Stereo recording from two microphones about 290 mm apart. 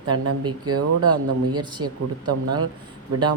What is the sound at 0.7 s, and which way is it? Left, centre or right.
Speech, right.